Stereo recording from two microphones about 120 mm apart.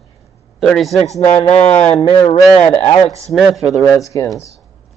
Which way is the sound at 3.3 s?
Centre (ahead or behind).